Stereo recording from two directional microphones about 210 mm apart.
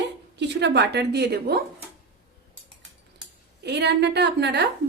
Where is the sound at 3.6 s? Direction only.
55° right (ahead or behind).